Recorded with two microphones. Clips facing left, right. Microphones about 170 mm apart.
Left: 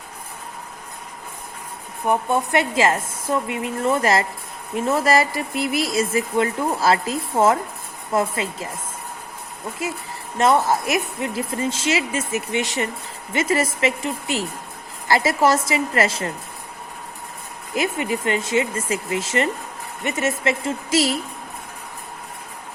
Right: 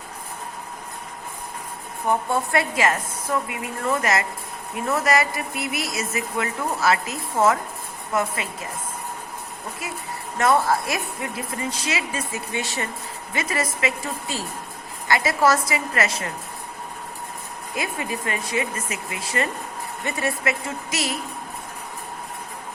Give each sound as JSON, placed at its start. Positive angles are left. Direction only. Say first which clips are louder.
{"t": 2.0, "sound": "speech", "louder": "left 2 dB", "side_deg": 20}
{"t": 9.8, "sound": "speech", "louder": "left 5 dB", "side_deg": 25}
{"t": 17.7, "sound": "speech", "louder": "left 6 dB", "side_deg": 25}